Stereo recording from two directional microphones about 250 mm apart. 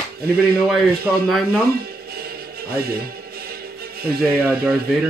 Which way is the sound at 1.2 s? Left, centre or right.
Centre.